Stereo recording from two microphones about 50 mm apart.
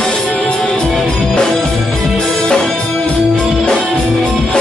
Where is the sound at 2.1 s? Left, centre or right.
Centre.